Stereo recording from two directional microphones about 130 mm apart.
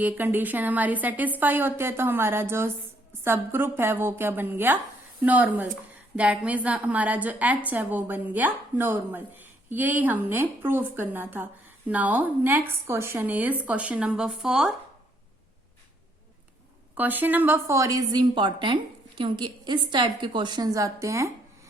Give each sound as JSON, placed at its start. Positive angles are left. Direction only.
{"t": 0.0, "sound": "a woman's voice", "side_deg": -15}
{"t": 16.9, "sound": "a woman's voice", "side_deg": -15}